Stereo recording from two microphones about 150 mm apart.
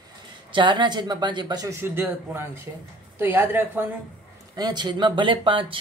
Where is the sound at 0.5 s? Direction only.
30° right (ahead or behind).